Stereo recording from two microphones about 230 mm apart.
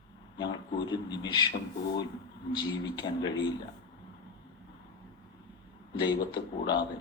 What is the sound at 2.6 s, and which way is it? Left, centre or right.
Speech, centre.